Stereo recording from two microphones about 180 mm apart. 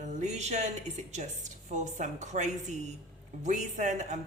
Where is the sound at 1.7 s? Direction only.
40° right (ahead or behind).